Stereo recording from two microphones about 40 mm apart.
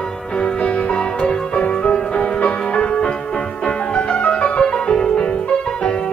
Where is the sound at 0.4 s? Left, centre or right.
Left.